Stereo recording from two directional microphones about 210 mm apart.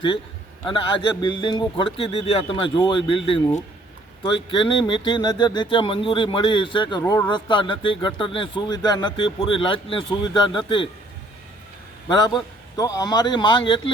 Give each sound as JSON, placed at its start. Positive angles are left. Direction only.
{"t": 0.6, "sound": "speech", "side_deg": 25}
{"t": 12.0, "sound": "speech", "side_deg": 20}